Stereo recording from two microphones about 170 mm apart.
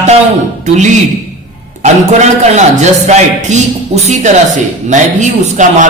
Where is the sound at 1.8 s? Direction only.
45° right (ahead or behind).